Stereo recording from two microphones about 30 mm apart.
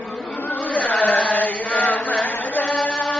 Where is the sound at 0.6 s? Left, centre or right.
Left.